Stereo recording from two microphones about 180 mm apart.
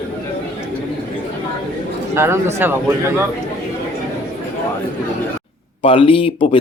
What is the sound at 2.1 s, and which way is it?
Speech, 15° right (ahead or behind).